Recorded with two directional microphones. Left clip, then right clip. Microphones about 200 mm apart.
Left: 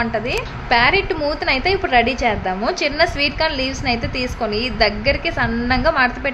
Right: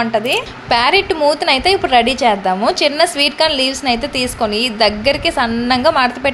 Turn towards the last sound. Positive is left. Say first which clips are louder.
# right 4 dB
turn(degrees=-20)  # may be behind; listen again after turning